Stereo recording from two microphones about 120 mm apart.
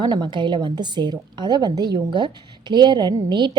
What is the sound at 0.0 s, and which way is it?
A woman's voice, 35° right (ahead or behind).